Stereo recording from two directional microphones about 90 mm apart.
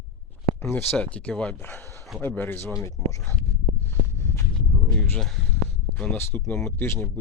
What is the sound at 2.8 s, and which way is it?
Speech, 35° left (ahead or behind).